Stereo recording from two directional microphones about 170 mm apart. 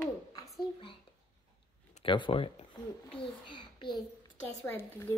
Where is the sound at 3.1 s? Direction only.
30° left (ahead or behind).